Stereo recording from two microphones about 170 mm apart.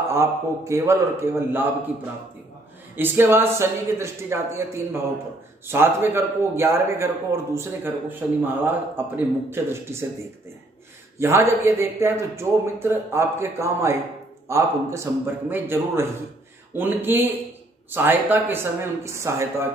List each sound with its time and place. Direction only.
0.1 s a man's voice: 15° right (ahead or behind)
3.0 s a man's voice: 15° right (ahead or behind)
11.1 s a man's voice: 15° right (ahead or behind)